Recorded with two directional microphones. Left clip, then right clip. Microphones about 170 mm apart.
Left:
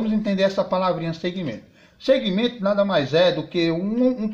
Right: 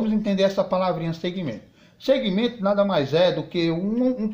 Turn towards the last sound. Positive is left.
turn(degrees=0)  # may be behind; listen again after turning